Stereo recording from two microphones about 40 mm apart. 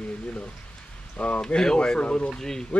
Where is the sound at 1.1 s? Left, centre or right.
Left.